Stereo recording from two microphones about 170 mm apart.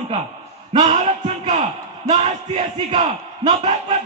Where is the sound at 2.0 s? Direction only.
30° right (ahead or behind).